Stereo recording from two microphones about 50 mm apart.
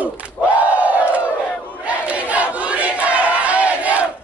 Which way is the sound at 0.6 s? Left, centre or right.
Right.